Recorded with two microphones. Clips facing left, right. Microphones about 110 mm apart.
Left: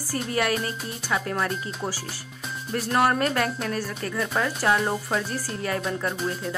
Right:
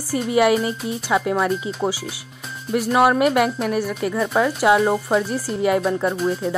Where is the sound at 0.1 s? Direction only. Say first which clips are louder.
Right 9 dB; 15° right (ahead or behind).